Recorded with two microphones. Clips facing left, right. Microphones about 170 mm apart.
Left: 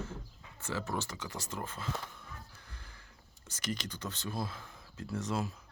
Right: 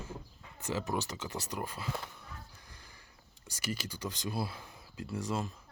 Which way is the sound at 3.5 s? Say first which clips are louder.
Even; 10° right (ahead or behind).